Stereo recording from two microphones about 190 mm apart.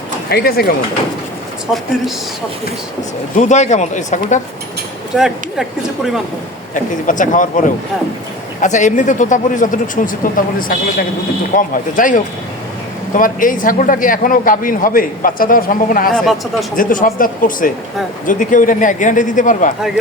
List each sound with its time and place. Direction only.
0.3 s a man's voice: 55° left (ahead or behind)
3.3 s speech: 40° left (ahead or behind)
5.1 s speech: centre (ahead or behind)
6.7 s a man's voice: 45° left (ahead or behind)
8.6 s a man's voice: 40° left (ahead or behind)
16.1 s speech: centre (ahead or behind)
16.7 s a man's voice: 45° left (ahead or behind)